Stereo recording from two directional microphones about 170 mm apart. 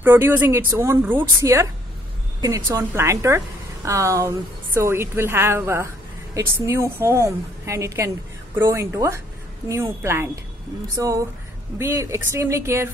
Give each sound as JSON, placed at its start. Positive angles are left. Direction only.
{"t": 0.0, "sound": "a woman's voice", "side_deg": -15}